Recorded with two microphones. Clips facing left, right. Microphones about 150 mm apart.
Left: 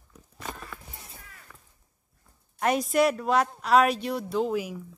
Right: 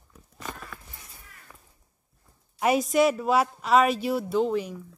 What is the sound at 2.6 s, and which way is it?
Speech, 5° right (ahead or behind).